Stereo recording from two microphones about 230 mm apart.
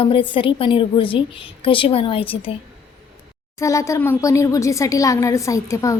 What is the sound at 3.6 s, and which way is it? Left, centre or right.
Speech, centre.